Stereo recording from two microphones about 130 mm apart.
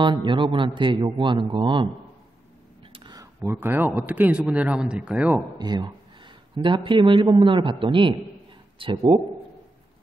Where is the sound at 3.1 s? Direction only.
30° right (ahead or behind).